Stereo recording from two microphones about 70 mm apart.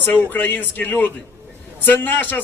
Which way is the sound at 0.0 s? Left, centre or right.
Left.